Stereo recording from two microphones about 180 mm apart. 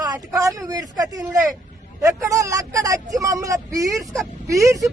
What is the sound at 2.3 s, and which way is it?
A man's voice, 20° right (ahead or behind).